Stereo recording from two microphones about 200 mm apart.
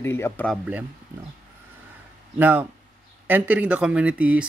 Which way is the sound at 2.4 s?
10° right (ahead or behind).